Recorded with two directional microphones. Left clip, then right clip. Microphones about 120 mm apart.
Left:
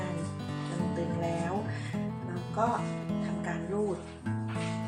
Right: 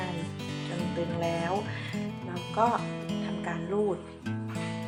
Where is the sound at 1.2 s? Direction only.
5° right (ahead or behind).